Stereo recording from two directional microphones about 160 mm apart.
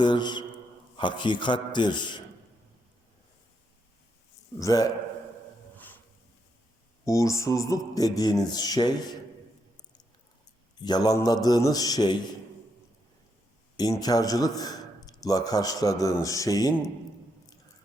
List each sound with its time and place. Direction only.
0.0 s a sound: 30° left (ahead or behind)
0.9 s a man's voice: 30° left (ahead or behind)
4.6 s a man's voice: 20° left (ahead or behind)
5.7 s a sound: 10° left (ahead or behind)
7.0 s a man's voice: 20° left (ahead or behind)
10.8 s a man's voice: 25° left (ahead or behind)
13.7 s a man's voice: 25° left (ahead or behind)